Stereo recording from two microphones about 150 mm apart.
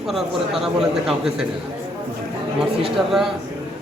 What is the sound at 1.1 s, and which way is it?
Speech, 5° right (ahead or behind).